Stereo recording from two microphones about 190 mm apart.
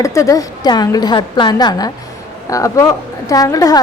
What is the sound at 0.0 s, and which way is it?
A woman's voice, 15° left (ahead or behind).